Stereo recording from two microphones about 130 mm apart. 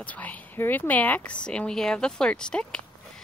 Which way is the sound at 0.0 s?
10° left (ahead or behind).